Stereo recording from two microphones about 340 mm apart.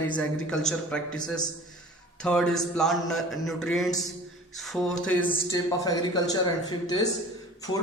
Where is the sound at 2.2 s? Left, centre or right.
Centre.